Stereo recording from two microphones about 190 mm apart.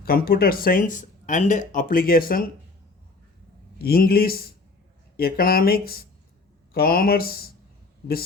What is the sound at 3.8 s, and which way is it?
Speech, 50° left (ahead or behind).